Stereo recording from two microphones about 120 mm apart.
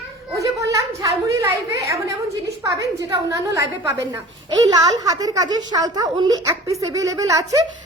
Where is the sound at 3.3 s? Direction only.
25° right (ahead or behind).